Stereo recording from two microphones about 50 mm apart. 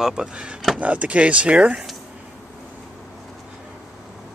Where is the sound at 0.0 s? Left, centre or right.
Centre.